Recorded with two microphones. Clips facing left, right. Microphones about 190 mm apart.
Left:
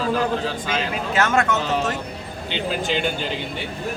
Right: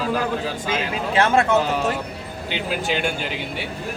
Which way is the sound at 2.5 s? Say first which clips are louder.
Left 1 dB; 10° right (ahead or behind).